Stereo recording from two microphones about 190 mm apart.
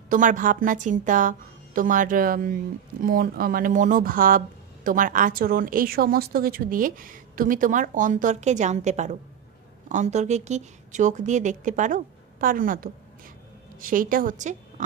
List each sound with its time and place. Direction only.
0.1 s a woman's voice: 45° right (ahead or behind)